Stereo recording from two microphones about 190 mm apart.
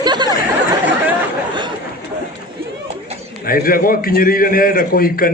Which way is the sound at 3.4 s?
50° left (ahead or behind).